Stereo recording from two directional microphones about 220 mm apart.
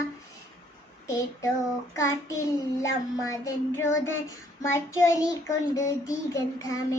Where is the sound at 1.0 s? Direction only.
15° left (ahead or behind).